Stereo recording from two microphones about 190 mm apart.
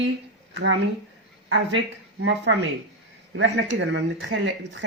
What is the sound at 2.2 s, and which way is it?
Speech, 70° right (ahead or behind).